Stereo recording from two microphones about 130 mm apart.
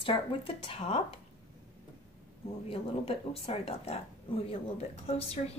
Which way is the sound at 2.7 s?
45° left (ahead or behind).